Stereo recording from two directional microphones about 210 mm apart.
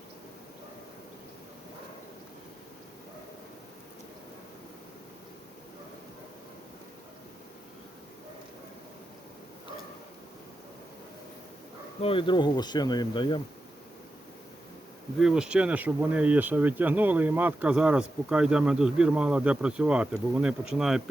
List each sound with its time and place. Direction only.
12.0 s speech: 25° left (ahead or behind)
15.2 s speech: centre (ahead or behind)